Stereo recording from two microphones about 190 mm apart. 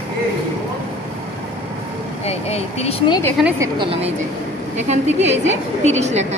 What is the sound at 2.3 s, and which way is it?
Speech, 35° left (ahead or behind).